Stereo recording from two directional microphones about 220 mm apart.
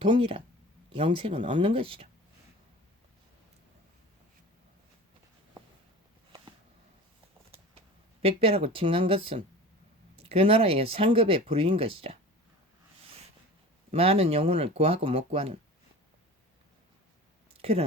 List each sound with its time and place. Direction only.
0.0 s speech: 25° right (ahead or behind)
7.5 s a sound: 25° right (ahead or behind)
10.2 s speech: 25° right (ahead or behind)
13.9 s speech: 25° right (ahead or behind)
17.6 s speech: 25° right (ahead or behind)